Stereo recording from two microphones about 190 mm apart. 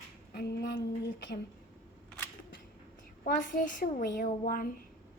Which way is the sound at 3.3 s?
45° left (ahead or behind).